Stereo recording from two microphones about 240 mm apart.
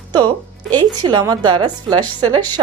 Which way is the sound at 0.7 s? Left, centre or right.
Centre.